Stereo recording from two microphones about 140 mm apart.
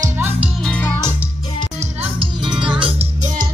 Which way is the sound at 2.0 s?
40° right (ahead or behind).